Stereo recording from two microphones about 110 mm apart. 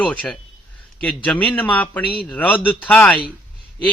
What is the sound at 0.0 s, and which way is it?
Speech, 10° left (ahead or behind).